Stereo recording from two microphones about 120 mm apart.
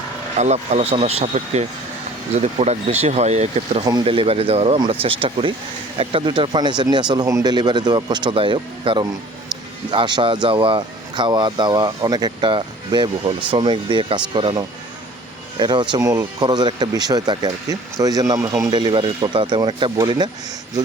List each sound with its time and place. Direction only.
0.3 s speech: 70° right (ahead or behind)
4.0 s speech: 50° right (ahead or behind)
15.5 s speech: 40° right (ahead or behind)
16.0 s speech: 30° right (ahead or behind)